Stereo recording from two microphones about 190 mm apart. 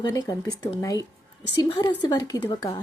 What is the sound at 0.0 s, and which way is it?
A woman's voice, 20° left (ahead or behind).